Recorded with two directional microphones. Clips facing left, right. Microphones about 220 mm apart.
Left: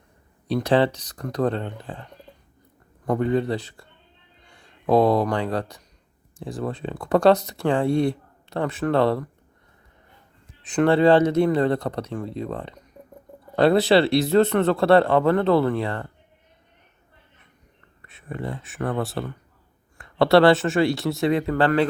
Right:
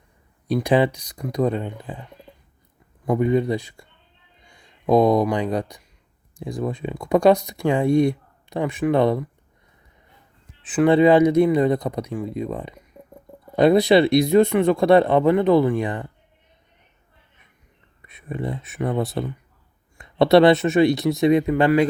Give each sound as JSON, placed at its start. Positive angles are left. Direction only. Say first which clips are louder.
{"t": 0.4, "sound": "speech", "louder": "right 1 dB", "side_deg": -10}
{"t": 3.1, "sound": "speech", "louder": "right 2 dB", "side_deg": -15}
{"t": 10.6, "sound": "speech", "louder": "right 2 dB", "side_deg": -5}
{"t": 18.0, "sound": "speech", "louder": "right 3 dB", "side_deg": -15}